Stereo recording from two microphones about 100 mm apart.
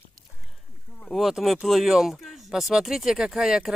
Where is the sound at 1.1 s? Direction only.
Centre (ahead or behind).